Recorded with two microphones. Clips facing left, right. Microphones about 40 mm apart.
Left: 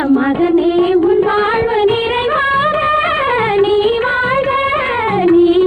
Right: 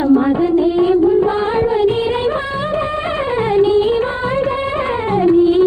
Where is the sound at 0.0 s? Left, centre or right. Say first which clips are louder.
Left 1 dB; left.